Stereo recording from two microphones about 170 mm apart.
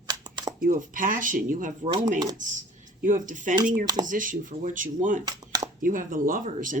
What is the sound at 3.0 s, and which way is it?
Speech, 50° right (ahead or behind).